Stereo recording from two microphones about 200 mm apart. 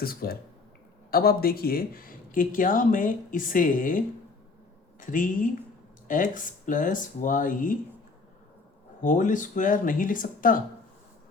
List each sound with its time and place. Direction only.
0.0 s speech: 50° left (ahead or behind)
9.0 s speech: 40° left (ahead or behind)